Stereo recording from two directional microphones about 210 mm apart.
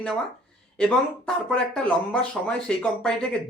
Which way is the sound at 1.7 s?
5° left (ahead or behind).